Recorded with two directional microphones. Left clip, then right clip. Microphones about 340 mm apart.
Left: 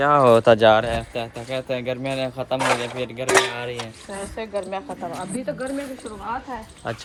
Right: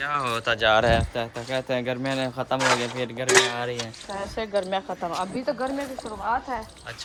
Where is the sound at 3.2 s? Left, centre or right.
Centre.